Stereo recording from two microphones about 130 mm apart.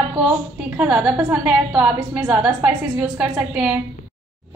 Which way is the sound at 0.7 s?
10° right (ahead or behind).